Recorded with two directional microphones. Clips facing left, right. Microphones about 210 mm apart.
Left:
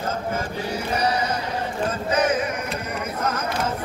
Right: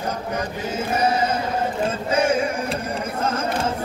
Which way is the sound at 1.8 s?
25° right (ahead or behind).